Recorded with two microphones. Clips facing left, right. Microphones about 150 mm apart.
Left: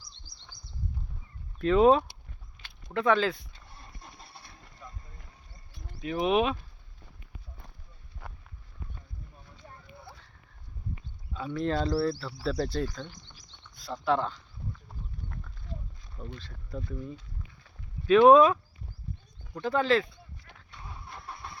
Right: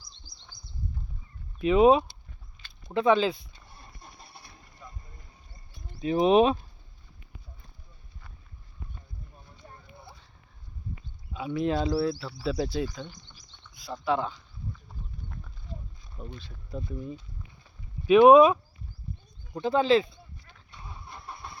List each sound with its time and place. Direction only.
1.5 s speech: 15° right (ahead or behind)
6.0 s speech: 30° right (ahead or behind)
9.6 s a sound: 15° right (ahead or behind)
11.3 s speech: 10° right (ahead or behind)
16.1 s speech: 10° right (ahead or behind)
17.6 s clip-clop: 15° right (ahead or behind)
19.6 s speech: 20° right (ahead or behind)
20.7 s vehicle: centre (ahead or behind)